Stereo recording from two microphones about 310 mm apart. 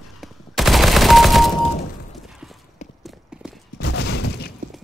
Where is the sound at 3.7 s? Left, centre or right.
Left.